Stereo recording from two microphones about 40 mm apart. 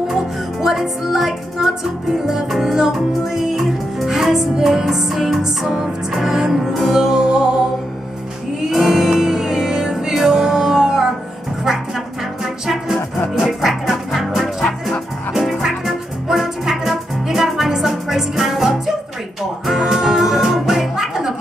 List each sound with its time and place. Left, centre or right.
0.1 s music: centre
6.6 s music: centre
8.6 s music: centre
12.6 s music: centre
15.6 s music: centre